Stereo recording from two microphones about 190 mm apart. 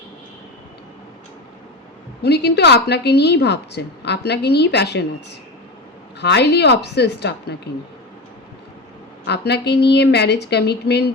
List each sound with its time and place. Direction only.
2.2 s a woman's voice: 60° left (ahead or behind)
6.1 s a woman's voice: 60° left (ahead or behind)
9.2 s a woman's voice: 60° left (ahead or behind)